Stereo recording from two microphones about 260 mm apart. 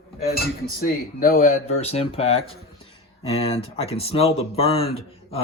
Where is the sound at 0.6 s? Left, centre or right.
Left.